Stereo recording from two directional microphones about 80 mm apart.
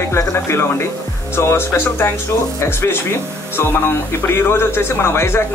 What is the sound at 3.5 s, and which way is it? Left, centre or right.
Speech, left.